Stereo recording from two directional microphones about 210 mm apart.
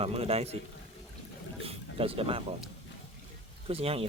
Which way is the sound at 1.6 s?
25° right (ahead or behind).